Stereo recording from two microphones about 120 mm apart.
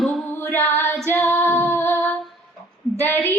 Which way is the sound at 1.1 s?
25° left (ahead or behind).